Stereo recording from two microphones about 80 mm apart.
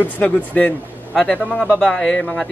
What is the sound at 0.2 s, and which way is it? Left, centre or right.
Speech, centre.